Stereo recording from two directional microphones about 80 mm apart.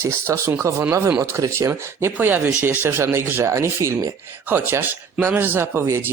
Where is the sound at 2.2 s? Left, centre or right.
Right.